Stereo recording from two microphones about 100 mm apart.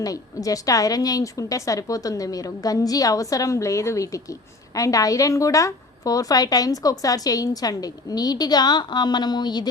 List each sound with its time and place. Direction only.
0.0 s a woman's voice: 35° left (ahead or behind)